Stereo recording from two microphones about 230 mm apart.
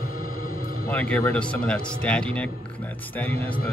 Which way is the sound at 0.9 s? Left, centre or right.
Centre.